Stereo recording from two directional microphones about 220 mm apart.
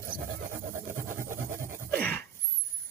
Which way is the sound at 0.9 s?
10° right (ahead or behind).